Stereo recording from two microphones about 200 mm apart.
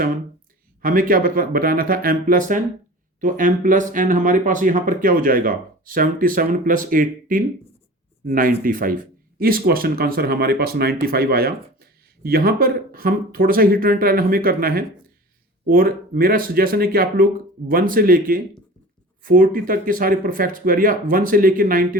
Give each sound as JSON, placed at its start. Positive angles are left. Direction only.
{"t": 0.8, "sound": "speech", "side_deg": -45}